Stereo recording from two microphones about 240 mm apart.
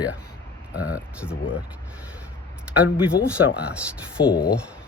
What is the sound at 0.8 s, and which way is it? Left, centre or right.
Speech, centre.